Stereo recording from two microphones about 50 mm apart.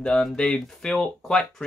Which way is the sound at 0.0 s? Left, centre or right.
Centre.